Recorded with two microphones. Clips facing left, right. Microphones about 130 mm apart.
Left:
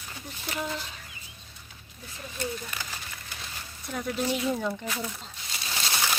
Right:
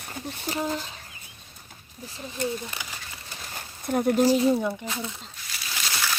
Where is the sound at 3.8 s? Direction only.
55° right (ahead or behind).